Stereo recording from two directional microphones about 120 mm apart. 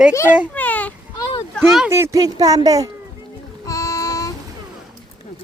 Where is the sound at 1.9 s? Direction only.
25° right (ahead or behind).